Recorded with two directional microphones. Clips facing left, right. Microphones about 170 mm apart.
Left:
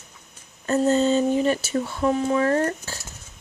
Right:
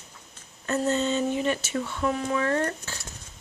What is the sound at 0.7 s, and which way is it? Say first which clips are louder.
Speech: left 6 dB; 35° left (ahead or behind).